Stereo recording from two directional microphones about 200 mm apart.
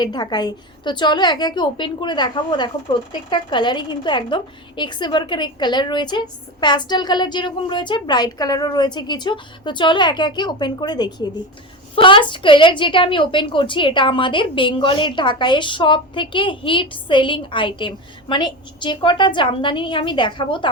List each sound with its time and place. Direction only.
0.0 s a woman's voice: 20° left (ahead or behind)